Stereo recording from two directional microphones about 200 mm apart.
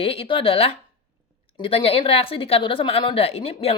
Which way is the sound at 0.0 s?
30° left (ahead or behind).